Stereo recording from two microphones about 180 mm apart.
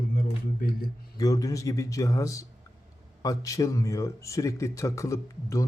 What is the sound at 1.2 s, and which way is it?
Speech, 20° left (ahead or behind).